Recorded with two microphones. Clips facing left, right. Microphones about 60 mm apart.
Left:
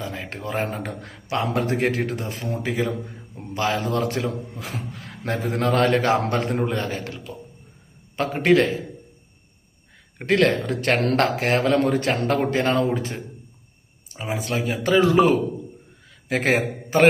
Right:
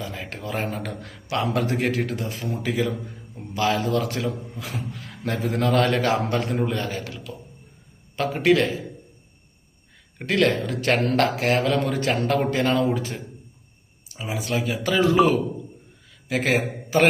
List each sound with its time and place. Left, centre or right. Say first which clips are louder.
0.0 s a man's voice: left 2 dB; left
8.4 s a man's voice: left 2 dB; left
10.2 s a man's voice: left 2 dB; left
16.3 s a man's voice: left 2 dB; left